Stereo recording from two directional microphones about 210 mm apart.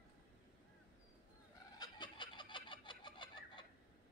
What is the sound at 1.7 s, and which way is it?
Chicken, 20° left (ahead or behind).